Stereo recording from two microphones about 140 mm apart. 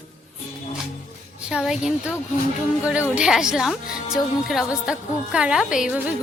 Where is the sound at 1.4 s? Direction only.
5° right (ahead or behind).